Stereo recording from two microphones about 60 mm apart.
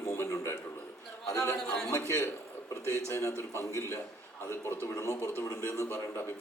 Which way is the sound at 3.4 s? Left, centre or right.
Left.